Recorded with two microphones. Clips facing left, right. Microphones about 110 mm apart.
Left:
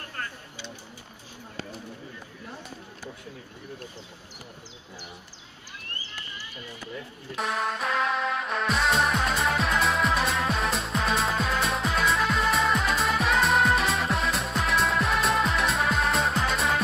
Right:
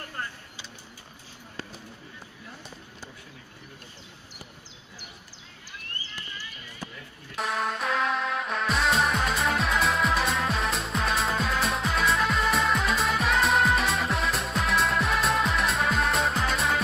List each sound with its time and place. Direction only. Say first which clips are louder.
7.3 s music: even; centre (ahead or behind)